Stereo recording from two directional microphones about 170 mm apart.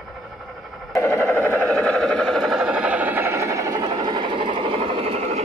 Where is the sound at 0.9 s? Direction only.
15° left (ahead or behind).